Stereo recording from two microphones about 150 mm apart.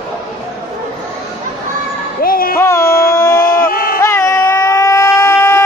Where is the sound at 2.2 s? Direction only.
75° left (ahead or behind).